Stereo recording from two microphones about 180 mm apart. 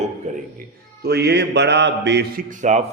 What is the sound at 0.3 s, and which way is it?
Dishes, 40° right (ahead or behind).